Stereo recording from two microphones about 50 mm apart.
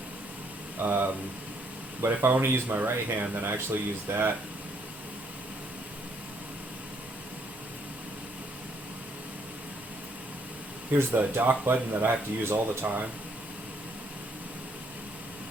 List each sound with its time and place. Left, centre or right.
0.8 s speech: right
10.9 s speech: right